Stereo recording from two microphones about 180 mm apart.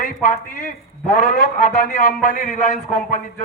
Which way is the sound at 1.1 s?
55° left (ahead or behind).